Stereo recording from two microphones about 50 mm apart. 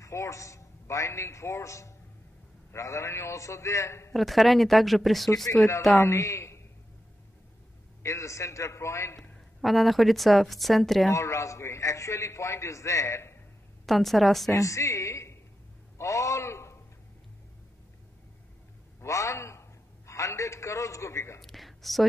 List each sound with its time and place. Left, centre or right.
0.0 s a man's voice: left
4.1 s a woman's voice: centre
5.9 s a man's voice: left
8.0 s a man's voice: left
9.6 s a woman's voice: centre
11.1 s a man's voice: left
13.8 s a woman's voice: centre
14.5 s a woman's voice: left
16.0 s a sound: left
18.9 s a sound: left
20.1 s a sound: left
21.4 s whispering: centre